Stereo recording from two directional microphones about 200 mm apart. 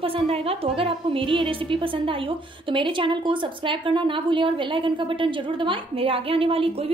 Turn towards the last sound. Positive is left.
turn(degrees=-30)  # may be behind; listen again after turning